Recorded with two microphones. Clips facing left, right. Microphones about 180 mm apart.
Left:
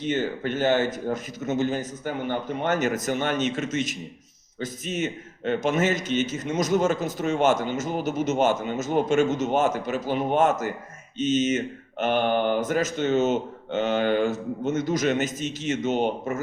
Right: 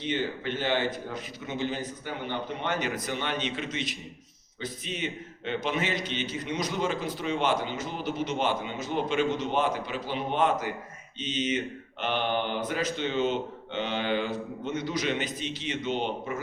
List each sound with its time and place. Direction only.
0.0 s a man's voice: 45° left (ahead or behind)